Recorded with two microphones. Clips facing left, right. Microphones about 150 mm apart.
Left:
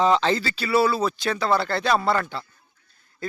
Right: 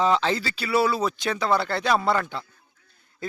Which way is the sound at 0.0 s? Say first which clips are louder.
Left 2 dB; 5° right (ahead or behind).